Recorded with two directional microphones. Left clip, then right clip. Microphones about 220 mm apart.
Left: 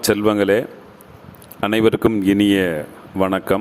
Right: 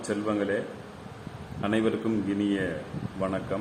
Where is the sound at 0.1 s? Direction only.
50° left (ahead or behind).